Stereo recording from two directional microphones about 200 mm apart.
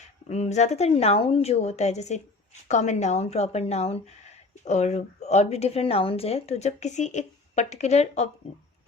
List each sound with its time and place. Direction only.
0.0 s a woman's voice: 35° left (ahead or behind)